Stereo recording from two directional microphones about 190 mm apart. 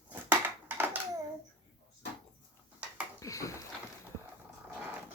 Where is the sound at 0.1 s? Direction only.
10° right (ahead or behind).